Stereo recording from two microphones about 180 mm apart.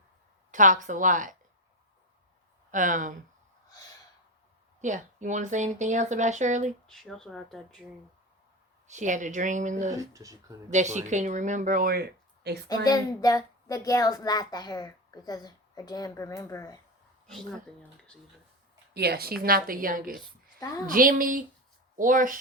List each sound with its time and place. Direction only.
0.5 s speech: 45° right (ahead or behind)
2.7 s speech: 45° right (ahead or behind)
4.8 s speech: 45° right (ahead or behind)
6.8 s speech: centre (ahead or behind)
8.9 s speech: 45° right (ahead or behind)
10.0 s speech: 20° right (ahead or behind)
10.7 s speech: 40° right (ahead or behind); by 12.5 s 65° right (ahead or behind)
12.6 s speech: 20° left (ahead or behind)
18.9 s a woman's voice: 60° right (ahead or behind)